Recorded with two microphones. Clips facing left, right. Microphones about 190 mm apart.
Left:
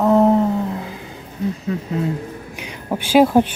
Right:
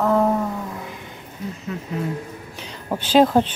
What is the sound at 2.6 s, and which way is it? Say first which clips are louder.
Speech: left 2 dB; 10° left (ahead or behind).